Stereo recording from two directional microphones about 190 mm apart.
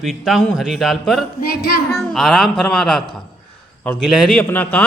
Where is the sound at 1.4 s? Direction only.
55° left (ahead or behind).